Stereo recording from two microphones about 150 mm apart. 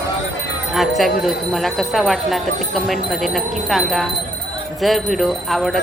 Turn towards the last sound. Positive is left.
turn(degrees=0)  # may be behind; listen again after turning